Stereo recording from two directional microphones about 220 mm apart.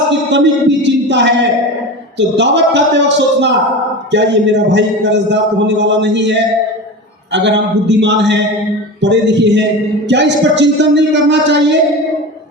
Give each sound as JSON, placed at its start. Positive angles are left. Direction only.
{"t": 0.3, "sound": "a man's voice", "side_deg": -55}